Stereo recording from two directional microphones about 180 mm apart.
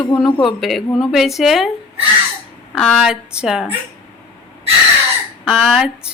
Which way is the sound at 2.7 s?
5° right (ahead or behind).